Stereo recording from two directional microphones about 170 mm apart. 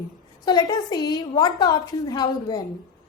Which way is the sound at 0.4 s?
25° left (ahead or behind).